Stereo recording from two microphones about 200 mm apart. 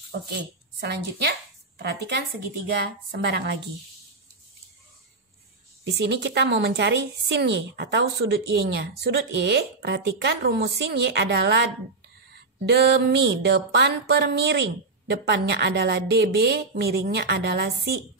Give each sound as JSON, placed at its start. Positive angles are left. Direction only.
{"t": 0.1, "sound": "a woman's voice", "side_deg": -55}
{"t": 5.9, "sound": "a woman's voice", "side_deg": -60}
{"t": 12.6, "sound": "a woman's voice", "side_deg": -55}